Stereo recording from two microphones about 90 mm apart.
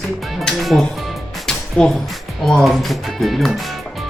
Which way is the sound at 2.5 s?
5° left (ahead or behind).